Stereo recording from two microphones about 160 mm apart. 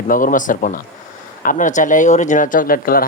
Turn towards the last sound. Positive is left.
turn(degrees=65)  # may be behind; listen again after turning